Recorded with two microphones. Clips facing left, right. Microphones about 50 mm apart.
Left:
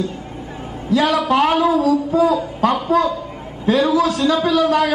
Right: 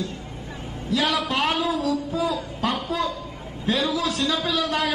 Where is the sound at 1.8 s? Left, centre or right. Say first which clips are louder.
Left 9 dB; left.